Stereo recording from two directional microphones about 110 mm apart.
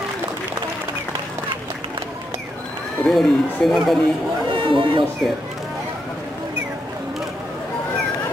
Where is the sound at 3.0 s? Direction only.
Centre (ahead or behind).